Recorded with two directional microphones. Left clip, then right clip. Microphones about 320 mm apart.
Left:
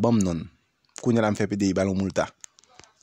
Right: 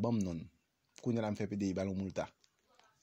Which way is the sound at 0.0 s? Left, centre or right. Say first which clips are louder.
Left 14 dB; left.